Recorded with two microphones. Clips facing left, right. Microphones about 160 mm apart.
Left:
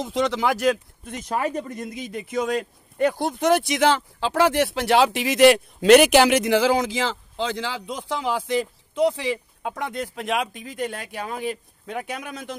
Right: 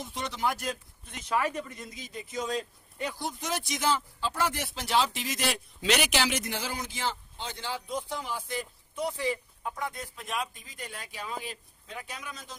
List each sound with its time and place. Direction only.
0.0 s speech: 90° left
1.0 s speech: 50° left (ahead or behind)
1.4 s speech: 35° left (ahead or behind); by 12.5 s 65° left (ahead or behind)